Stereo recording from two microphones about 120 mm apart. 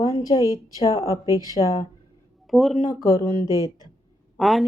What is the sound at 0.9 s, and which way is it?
Speech, 25° right (ahead or behind).